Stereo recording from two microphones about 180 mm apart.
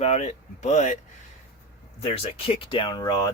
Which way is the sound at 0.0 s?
40° left (ahead or behind).